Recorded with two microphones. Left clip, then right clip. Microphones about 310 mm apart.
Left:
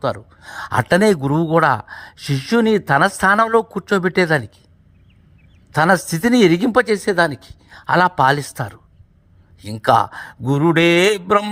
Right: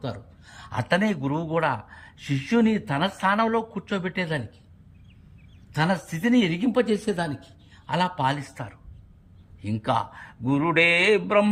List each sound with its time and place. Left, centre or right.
0.0 s speech: centre
5.7 s speech: centre
10.4 s mantra: left